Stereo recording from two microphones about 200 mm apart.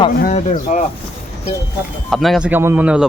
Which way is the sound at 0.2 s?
40° left (ahead or behind).